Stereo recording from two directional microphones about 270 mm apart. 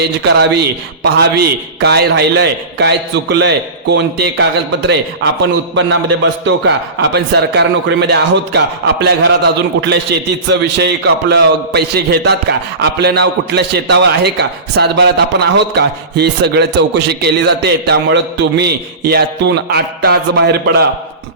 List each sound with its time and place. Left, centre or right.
0.3 s a man's voice: right
6.4 s a man's voice: right